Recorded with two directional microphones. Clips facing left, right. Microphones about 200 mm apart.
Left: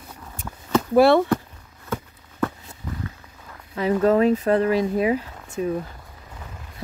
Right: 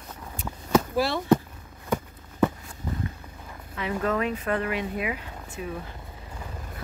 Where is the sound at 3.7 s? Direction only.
35° left (ahead or behind).